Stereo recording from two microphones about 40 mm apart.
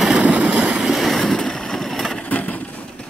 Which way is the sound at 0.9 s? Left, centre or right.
Centre.